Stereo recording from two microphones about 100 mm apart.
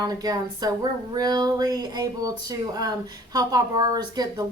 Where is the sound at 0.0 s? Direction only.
40° right (ahead or behind).